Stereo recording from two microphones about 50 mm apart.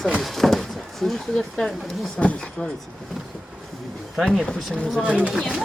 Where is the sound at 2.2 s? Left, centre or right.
Left.